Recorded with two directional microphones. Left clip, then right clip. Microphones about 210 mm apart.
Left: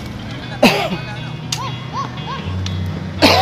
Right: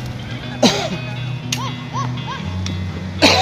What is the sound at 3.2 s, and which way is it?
Cough, centre (ahead or behind).